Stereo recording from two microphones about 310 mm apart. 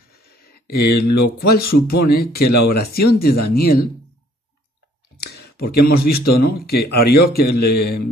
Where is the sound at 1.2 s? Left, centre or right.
Left.